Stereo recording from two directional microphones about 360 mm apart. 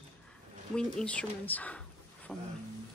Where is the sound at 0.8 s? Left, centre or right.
Centre.